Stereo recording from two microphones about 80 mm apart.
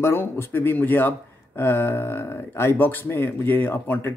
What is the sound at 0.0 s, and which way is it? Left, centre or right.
Speech, left.